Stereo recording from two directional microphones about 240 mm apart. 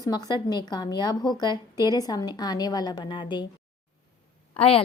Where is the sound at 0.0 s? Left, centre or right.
Centre.